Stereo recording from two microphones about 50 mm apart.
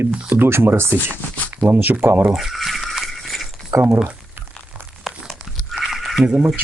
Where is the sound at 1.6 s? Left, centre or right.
Left.